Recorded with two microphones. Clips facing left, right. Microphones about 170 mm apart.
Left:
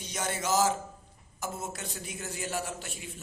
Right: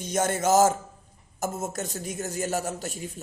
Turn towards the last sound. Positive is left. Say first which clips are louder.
# right 7 dB
turn(degrees=-40)  # may be behind; listen again after turning